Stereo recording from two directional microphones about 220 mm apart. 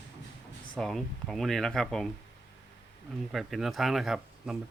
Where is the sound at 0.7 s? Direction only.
Centre (ahead or behind).